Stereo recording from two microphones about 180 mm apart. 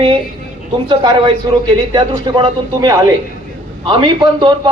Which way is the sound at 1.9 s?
25° right (ahead or behind).